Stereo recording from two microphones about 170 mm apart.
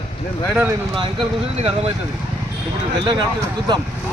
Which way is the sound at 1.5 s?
35° right (ahead or behind).